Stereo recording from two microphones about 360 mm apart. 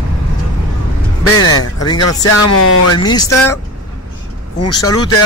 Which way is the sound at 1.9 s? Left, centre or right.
Left.